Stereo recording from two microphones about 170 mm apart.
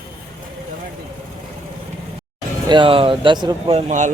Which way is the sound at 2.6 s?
30° right (ahead or behind).